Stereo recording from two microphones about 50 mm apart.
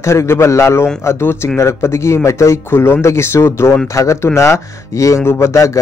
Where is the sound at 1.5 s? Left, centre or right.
Left.